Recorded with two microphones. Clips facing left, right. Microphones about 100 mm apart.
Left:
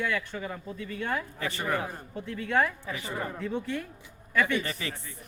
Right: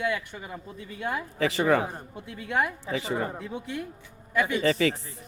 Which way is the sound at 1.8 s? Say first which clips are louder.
Right 4 dB; 25° right (ahead or behind).